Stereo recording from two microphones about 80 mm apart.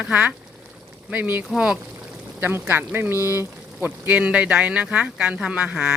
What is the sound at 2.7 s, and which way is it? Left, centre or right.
Speech, right.